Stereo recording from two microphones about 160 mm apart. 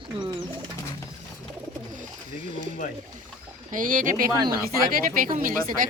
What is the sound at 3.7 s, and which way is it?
Speech, 55° right (ahead or behind).